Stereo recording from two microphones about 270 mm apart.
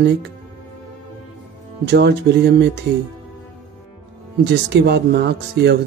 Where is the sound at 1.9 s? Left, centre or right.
Right.